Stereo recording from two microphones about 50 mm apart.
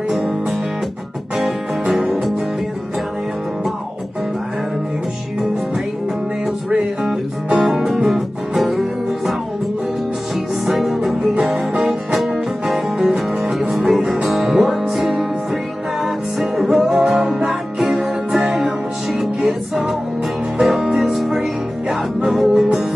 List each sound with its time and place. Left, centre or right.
0.1 s music: centre
1.9 s music: centre
6.8 s music: centre
10.6 s music: centre